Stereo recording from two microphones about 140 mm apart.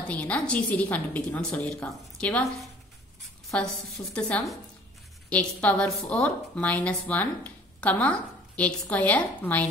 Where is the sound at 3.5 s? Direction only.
10° left (ahead or behind).